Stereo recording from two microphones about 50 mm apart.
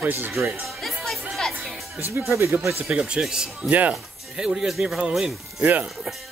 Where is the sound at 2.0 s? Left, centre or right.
Right.